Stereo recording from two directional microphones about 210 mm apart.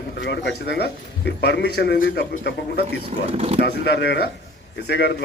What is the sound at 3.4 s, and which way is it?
Speech, 30° right (ahead or behind).